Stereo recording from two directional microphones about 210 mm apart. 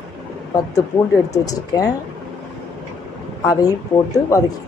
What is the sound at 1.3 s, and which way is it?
Speech, 15° left (ahead or behind).